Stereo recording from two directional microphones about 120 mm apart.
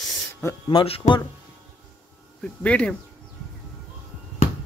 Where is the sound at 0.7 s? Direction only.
45° left (ahead or behind).